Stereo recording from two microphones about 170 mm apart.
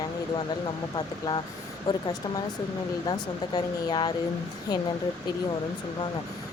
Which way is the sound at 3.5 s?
25° left (ahead or behind).